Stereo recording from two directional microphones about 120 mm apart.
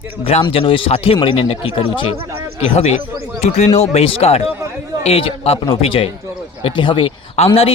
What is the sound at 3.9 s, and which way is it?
Speech, 55° left (ahead or behind).